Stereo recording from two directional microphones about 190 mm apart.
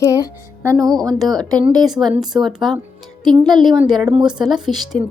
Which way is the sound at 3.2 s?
20° right (ahead or behind).